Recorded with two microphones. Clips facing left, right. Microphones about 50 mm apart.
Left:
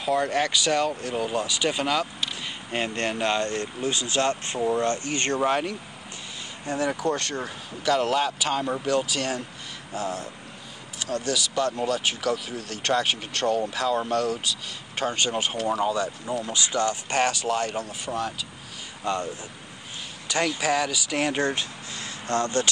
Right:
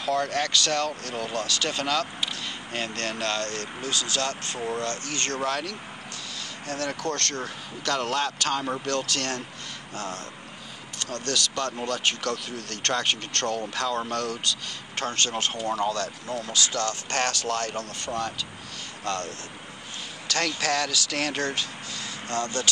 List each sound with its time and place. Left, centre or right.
0.0 s speech: centre; by 22.7 s left